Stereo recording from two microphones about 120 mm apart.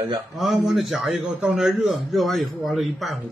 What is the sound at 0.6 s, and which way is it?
A man's voice, centre (ahead or behind).